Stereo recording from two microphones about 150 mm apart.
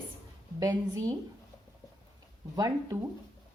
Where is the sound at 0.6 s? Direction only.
25° right (ahead or behind).